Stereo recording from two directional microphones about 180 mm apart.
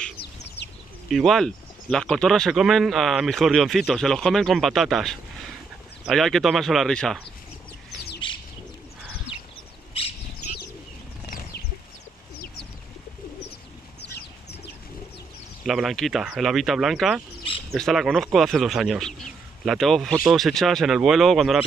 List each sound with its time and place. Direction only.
0.2 s bird: 70° left (ahead or behind)
1.0 s speech: centre (ahead or behind)
8.2 s bird: 25° left (ahead or behind)
11.2 s a sound: 50° left (ahead or behind)
15.6 s speech: centre (ahead or behind)